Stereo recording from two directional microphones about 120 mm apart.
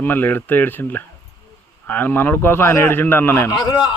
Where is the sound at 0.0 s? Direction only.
15° left (ahead or behind).